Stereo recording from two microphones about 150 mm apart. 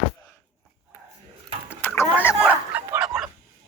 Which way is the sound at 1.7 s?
15° left (ahead or behind).